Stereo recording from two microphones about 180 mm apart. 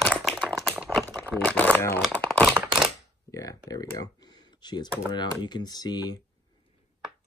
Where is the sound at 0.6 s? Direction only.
Centre (ahead or behind).